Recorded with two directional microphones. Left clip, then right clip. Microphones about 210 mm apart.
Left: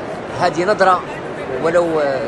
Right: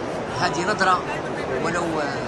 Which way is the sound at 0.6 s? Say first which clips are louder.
Left 7 dB; 10° right (ahead or behind).